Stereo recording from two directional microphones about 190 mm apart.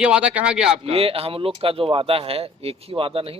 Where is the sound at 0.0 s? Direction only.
5° right (ahead or behind).